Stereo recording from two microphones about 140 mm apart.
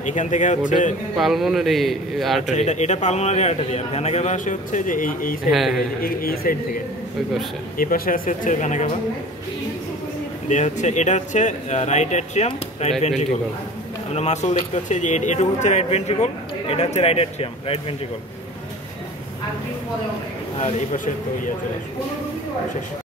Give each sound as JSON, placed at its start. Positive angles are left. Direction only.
{"t": 0.0, "sound": "a man's voice", "side_deg": 60}
{"t": 1.1, "sound": "a man's voice", "side_deg": 0}
{"t": 2.5, "sound": "a man's voice", "side_deg": 55}
{"t": 5.5, "sound": "a man's voice", "side_deg": 0}
{"t": 5.8, "sound": "a man's voice", "side_deg": 90}
{"t": 7.7, "sound": "a man's voice", "side_deg": 90}
{"t": 10.5, "sound": "a man's voice", "side_deg": 55}
{"t": 14.1, "sound": "speech", "side_deg": 55}
{"t": 20.6, "sound": "speech", "side_deg": 65}